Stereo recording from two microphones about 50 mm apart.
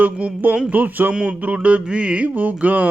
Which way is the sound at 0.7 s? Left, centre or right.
Right.